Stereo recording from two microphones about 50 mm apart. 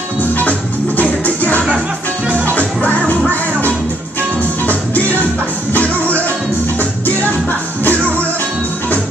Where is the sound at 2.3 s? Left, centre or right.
Right.